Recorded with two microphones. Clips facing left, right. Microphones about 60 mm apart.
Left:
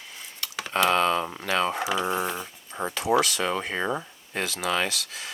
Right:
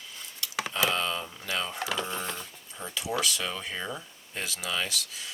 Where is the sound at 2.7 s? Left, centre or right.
Left.